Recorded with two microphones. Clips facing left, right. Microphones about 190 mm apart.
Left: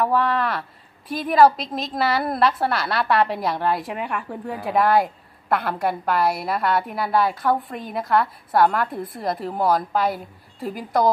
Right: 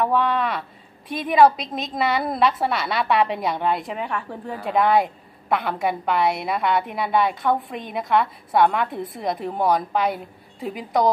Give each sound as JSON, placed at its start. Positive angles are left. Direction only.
{"t": 0.0, "sound": "a woman's voice", "side_deg": 0}